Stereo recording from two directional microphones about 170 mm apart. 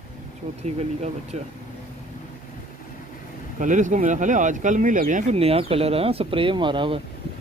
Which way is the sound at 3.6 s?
45° right (ahead or behind).